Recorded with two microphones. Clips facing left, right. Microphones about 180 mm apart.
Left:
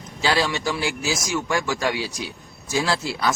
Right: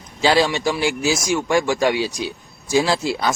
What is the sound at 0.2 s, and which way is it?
Speech, 20° right (ahead or behind).